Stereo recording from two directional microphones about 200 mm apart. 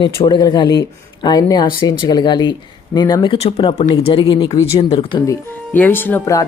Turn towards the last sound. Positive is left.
turn(degrees=15)  # may be behind; listen again after turning